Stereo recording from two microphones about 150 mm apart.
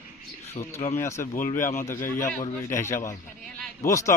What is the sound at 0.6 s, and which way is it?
Speech, 30° left (ahead or behind).